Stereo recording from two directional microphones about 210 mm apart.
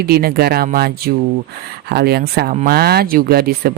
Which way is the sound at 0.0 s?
45° right (ahead or behind).